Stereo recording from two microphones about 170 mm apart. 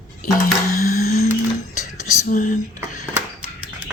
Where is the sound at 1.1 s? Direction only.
45° left (ahead or behind).